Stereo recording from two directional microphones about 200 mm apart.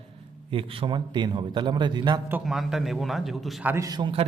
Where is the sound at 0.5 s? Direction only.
25° right (ahead or behind).